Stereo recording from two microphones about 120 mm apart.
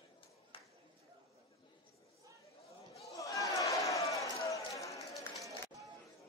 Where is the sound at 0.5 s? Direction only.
45° left (ahead or behind).